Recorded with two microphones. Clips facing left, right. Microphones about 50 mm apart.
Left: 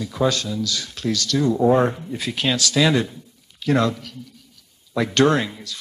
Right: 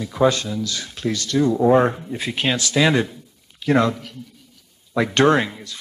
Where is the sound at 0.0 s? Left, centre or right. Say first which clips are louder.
Right 3 dB; centre.